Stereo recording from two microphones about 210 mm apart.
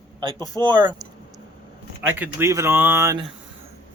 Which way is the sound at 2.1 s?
10° right (ahead or behind).